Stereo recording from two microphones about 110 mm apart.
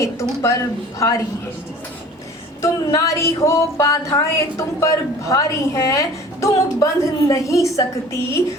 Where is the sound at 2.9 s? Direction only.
30° left (ahead or behind).